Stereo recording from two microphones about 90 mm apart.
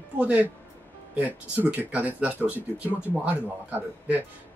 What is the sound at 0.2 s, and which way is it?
Speech, 15° right (ahead or behind).